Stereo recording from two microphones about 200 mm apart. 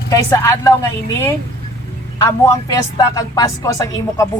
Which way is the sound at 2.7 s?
15° left (ahead or behind).